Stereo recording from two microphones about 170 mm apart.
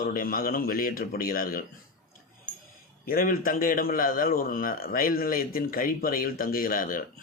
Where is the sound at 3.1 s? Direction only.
55° left (ahead or behind).